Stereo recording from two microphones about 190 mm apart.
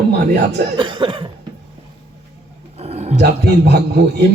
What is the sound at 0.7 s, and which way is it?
Cough, 25° right (ahead or behind).